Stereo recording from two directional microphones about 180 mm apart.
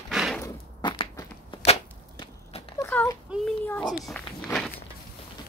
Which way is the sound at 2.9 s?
10° left (ahead or behind).